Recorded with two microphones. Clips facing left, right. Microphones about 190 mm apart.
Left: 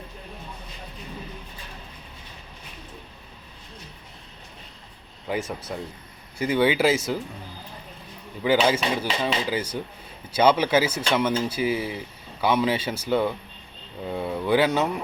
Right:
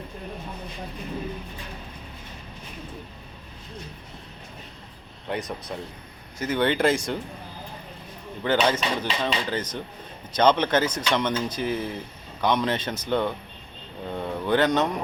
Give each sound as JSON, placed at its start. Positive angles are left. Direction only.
{"t": 5.3, "sound": "speech", "side_deg": 5}
{"t": 8.4, "sound": "speech", "side_deg": 10}